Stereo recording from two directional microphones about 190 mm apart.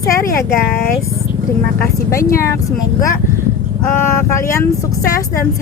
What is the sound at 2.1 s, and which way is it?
Speech, 15° left (ahead or behind).